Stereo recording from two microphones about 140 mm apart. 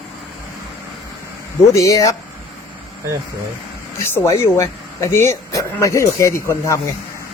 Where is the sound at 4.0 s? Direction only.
20° left (ahead or behind).